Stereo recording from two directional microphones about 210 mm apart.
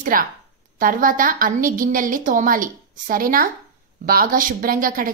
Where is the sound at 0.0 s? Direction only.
40° right (ahead or behind).